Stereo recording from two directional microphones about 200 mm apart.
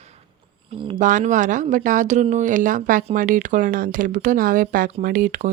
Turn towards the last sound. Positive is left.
turn(degrees=-45)  # may be behind; listen again after turning